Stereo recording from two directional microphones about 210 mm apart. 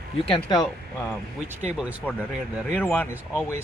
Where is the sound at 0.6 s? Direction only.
Centre (ahead or behind).